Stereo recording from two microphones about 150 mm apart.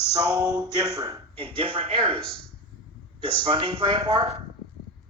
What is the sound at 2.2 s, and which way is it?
Speech, 5° left (ahead or behind).